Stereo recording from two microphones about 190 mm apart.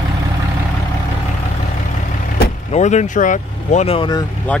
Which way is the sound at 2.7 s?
40° left (ahead or behind).